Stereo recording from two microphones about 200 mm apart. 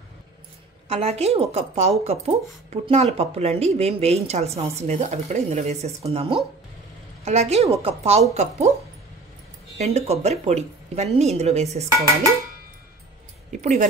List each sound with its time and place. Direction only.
0.8 s a woman's voice: 30° right (ahead or behind)
9.8 s a woman's voice: 30° right (ahead or behind)
13.5 s speech: 35° right (ahead or behind)